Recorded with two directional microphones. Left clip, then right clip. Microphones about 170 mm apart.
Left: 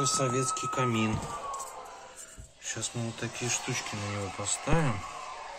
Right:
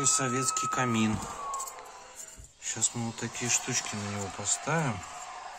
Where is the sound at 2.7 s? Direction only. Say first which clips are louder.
Right 2 dB; 60° right (ahead or behind).